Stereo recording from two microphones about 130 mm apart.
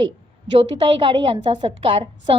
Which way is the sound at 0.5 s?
45° right (ahead or behind).